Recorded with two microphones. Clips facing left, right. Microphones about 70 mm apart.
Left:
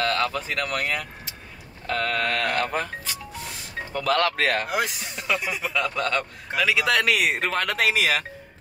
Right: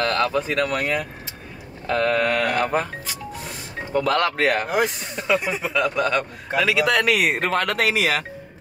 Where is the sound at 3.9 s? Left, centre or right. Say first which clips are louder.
Right 2 dB; centre.